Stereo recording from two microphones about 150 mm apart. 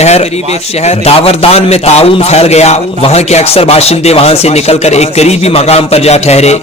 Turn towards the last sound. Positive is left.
turn(degrees=45)  # may be behind; listen again after turning